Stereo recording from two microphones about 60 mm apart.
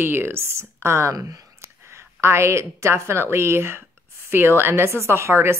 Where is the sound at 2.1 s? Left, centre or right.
Right.